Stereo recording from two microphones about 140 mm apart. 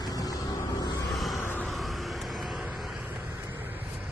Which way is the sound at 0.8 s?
30° left (ahead or behind).